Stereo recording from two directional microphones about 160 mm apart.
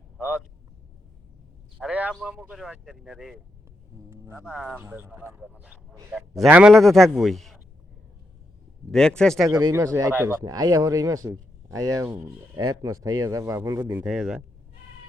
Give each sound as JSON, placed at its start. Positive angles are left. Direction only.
{"t": 0.2, "sound": "vehicle", "side_deg": -10}
{"t": 1.8, "sound": "a sound", "side_deg": -10}
{"t": 2.1, "sound": "speech", "side_deg": -5}
{"t": 4.1, "sound": "a sound", "side_deg": -15}
{"t": 4.4, "sound": "speech", "side_deg": -5}
{"t": 4.8, "sound": "speech", "side_deg": -15}
{"t": 8.9, "sound": "speech", "side_deg": 5}
{"t": 9.5, "sound": "speech", "side_deg": -25}
{"t": 14.0, "sound": "speech", "side_deg": -5}